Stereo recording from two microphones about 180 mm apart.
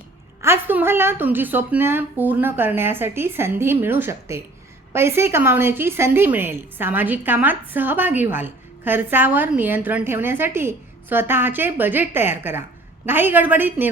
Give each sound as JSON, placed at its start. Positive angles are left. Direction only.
{"t": 0.4, "sound": "a woman's voice", "side_deg": -10}